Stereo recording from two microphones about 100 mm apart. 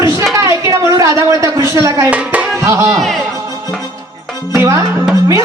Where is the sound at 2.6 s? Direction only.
30° right (ahead or behind).